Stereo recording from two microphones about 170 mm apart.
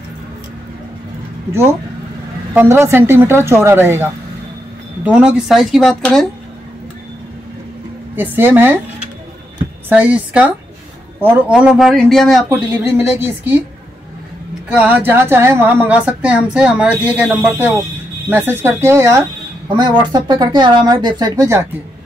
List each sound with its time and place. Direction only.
1.5 s a woman's voice: 15° right (ahead or behind); by 6.2 s centre (ahead or behind)
8.2 s a woman's voice: 10° right (ahead or behind)
9.8 s a woman's voice: 10° right (ahead or behind)
12.4 s a woman's voice: 10° right (ahead or behind)
14.7 s a woman's voice: 10° right (ahead or behind)
19.7 s speech: 25° right (ahead or behind)